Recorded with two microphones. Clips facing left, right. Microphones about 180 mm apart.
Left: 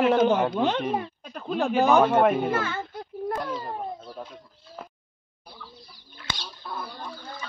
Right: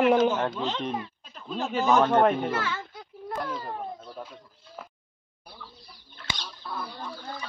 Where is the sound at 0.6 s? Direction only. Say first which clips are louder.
Left 6 dB; 60° left (ahead or behind).